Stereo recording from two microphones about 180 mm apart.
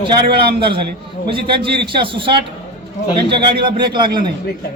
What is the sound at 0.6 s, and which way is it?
A man's voice, 30° right (ahead or behind).